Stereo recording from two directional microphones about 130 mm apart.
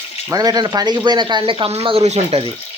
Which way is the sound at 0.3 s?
30° right (ahead or behind).